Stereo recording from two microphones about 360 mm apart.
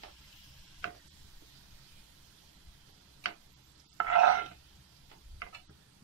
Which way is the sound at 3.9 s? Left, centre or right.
Right.